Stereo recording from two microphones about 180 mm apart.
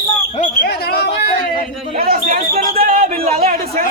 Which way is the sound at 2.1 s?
50° right (ahead or behind).